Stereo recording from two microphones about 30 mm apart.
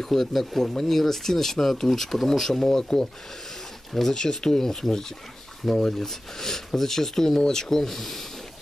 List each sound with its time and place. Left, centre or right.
0.0 s speech: centre
4.1 s speech: left
5.6 s speech: centre
5.9 s speech: centre